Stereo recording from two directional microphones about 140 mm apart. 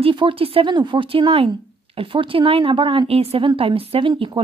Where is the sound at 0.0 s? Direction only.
35° right (ahead or behind).